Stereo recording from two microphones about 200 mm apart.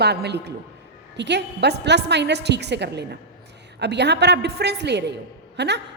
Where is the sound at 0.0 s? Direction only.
55° right (ahead or behind).